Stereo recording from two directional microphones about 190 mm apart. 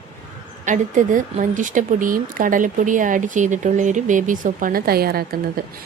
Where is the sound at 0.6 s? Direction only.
40° right (ahead or behind).